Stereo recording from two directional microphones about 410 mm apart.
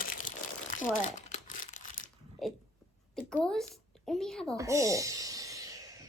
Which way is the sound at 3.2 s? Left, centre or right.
Centre.